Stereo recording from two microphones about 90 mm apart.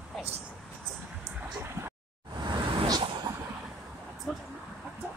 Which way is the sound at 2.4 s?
60° right (ahead or behind).